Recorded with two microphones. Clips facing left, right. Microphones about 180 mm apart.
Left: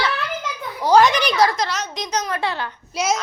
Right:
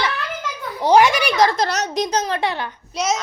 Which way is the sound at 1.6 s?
40° right (ahead or behind).